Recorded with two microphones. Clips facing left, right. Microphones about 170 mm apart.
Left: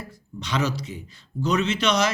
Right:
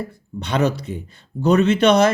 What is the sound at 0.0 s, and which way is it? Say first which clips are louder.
Speech: right 8 dB; 55° right (ahead or behind).